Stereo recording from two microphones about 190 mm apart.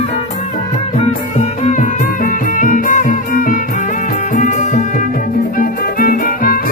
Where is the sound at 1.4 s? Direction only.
40° left (ahead or behind).